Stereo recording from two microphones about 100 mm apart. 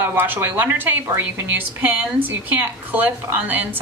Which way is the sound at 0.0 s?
20° right (ahead or behind).